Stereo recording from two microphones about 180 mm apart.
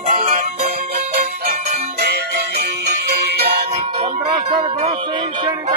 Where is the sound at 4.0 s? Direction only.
25° right (ahead or behind).